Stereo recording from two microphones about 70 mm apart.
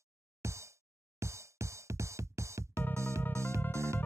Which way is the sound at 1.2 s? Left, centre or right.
Right.